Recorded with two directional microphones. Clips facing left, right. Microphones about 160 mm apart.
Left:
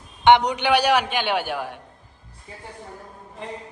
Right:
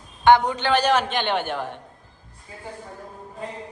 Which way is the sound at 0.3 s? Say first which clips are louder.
Left 1 dB; 20° left (ahead or behind).